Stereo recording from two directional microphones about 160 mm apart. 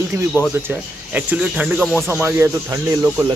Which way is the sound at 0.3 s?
15° right (ahead or behind).